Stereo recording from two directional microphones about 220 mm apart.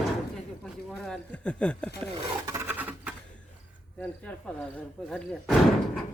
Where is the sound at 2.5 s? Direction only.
10° right (ahead or behind).